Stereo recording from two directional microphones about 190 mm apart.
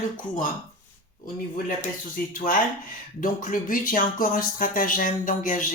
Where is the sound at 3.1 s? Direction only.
45° left (ahead or behind).